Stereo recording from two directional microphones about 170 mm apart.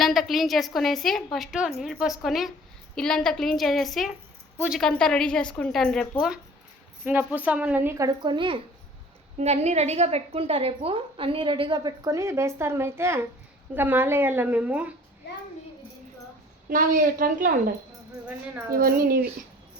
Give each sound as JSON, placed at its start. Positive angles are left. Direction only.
{"t": 0.0, "sound": "a woman's voice", "side_deg": 0}
{"t": 9.4, "sound": "a woman's voice", "side_deg": -40}
{"t": 16.6, "sound": "a woman's voice", "side_deg": -55}